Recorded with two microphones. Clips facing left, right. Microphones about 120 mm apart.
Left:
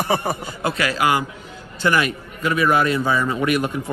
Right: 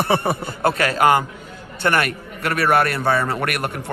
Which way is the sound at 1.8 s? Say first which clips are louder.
Even; 60° right (ahead or behind).